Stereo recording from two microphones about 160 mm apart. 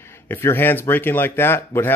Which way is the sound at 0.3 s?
15° left (ahead or behind).